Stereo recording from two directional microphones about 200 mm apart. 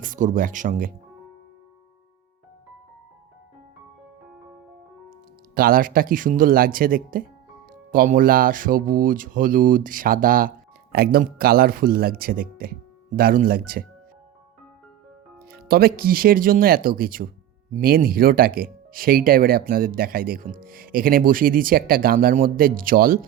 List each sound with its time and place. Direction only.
0.0 s speech: 40° right (ahead or behind)
5.5 s speech: 45° right (ahead or behind)
15.4 s speech: 50° right (ahead or behind)